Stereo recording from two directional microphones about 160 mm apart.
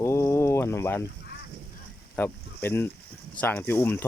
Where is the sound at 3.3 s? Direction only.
10° left (ahead or behind).